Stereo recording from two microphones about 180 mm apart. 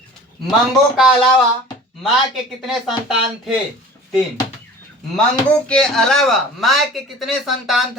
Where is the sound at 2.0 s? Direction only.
Centre (ahead or behind).